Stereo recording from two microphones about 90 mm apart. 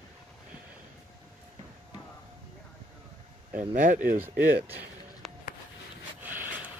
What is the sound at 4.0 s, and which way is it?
Speech, 20° right (ahead or behind).